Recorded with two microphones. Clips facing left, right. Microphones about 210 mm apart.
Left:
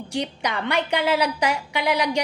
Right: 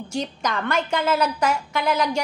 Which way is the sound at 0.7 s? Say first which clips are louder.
Left 1 dB; 15° left (ahead or behind).